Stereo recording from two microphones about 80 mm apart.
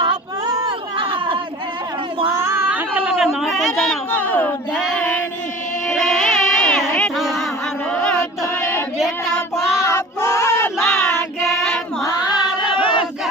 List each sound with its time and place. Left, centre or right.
0.9 s chatter: right
2.7 s a sound: centre
3.4 s a sound: centre
4.1 s speech: left
4.9 s child singing: centre
5.9 s music: centre
9.8 s choir: left
10.8 s child singing: centre
12.7 s battle cry: left